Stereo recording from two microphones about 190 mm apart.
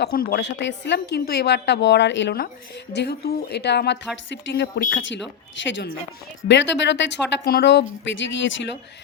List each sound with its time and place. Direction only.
0.0 s a woman's voice: 55° left (ahead or behind); by 8.8 s 70° left (ahead or behind)